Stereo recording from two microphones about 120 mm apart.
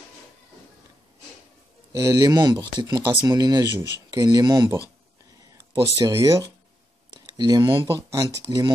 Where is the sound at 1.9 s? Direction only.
30° right (ahead or behind).